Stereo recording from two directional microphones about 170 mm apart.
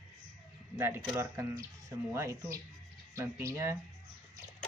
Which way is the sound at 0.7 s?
15° right (ahead or behind).